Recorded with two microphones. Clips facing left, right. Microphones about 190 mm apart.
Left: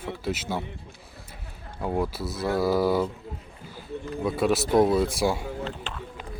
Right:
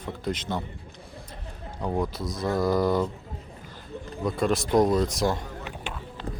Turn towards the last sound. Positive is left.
turn(degrees=-10)  # may be behind; listen again after turning